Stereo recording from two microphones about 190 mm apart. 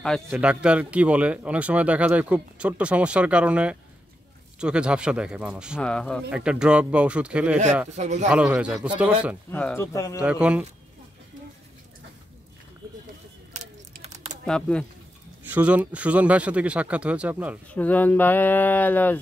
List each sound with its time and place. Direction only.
0.3 s speech: 5° right (ahead or behind)
5.8 s speech: 5° left (ahead or behind)
6.3 s speech: 5° right (ahead or behind)
7.9 s speech: 35° right (ahead or behind)
8.3 s speech: 5° right (ahead or behind)
9.5 s speech: 10° left (ahead or behind)
10.2 s speech: 5° right (ahead or behind)
13.5 s a sound: 35° right (ahead or behind)
14.4 s speech: 5° left (ahead or behind)
15.4 s speech: 10° right (ahead or behind)
17.6 s speech: 10° left (ahead or behind)